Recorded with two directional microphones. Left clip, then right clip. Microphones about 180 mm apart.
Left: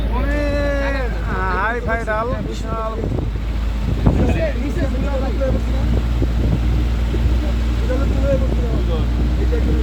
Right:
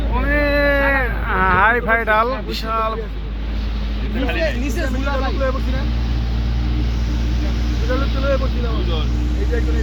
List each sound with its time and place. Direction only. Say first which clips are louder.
0.3 s cat: right 6 dB; 10° right (ahead or behind)
0.8 s vehicle: right 5 dB; 25° right (ahead or behind)
4.3 s vehicle: right 1 dB; 30° right (ahead or behind)